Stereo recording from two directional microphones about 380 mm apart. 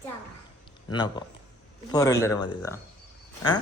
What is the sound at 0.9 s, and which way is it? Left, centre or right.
Speech, centre.